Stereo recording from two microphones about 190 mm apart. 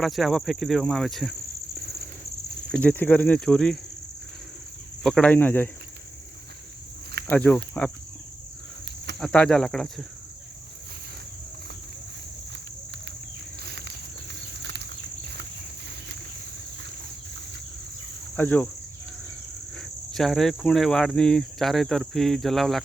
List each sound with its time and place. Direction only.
0.0 s speech: centre (ahead or behind)
2.7 s speech: 10° left (ahead or behind)
5.0 s speech: 5° left (ahead or behind)
7.3 s speech: 10° left (ahead or behind)
9.1 s speech: 5° left (ahead or behind)
13.7 s a sound: 60° right (ahead or behind)
18.3 s speech: 10° left (ahead or behind)
19.8 s speech: centre (ahead or behind)